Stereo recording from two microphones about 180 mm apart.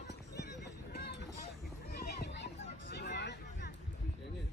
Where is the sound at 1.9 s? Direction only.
60° left (ahead or behind).